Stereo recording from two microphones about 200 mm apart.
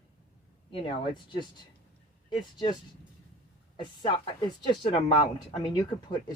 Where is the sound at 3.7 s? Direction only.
20° left (ahead or behind).